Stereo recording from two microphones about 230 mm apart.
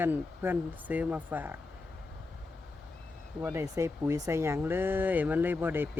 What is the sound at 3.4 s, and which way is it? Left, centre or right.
Speech, centre.